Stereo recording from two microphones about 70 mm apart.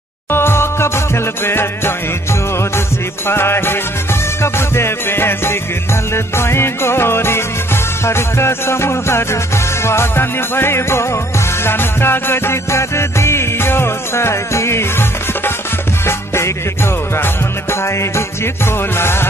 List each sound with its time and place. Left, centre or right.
0.3 s music: left
3.3 s music: left